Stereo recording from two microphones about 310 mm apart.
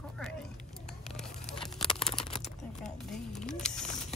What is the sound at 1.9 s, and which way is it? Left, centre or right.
Computer keyboard, centre.